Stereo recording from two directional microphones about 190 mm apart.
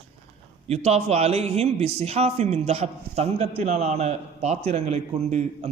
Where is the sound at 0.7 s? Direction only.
35° right (ahead or behind).